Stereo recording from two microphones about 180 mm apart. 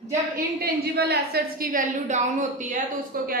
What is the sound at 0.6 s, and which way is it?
A woman's voice, 65° right (ahead or behind).